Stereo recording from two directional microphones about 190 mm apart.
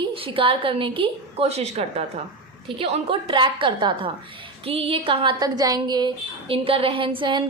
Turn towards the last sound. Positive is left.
turn(degrees=-25)  # may be behind; listen again after turning